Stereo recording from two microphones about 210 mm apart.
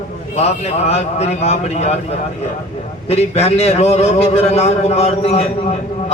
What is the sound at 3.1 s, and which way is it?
A man's voice, 30° left (ahead or behind).